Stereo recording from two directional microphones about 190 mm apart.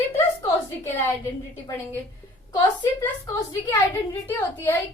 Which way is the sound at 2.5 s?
25° left (ahead or behind).